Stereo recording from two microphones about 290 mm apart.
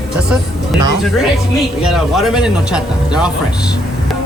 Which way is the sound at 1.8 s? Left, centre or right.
Centre.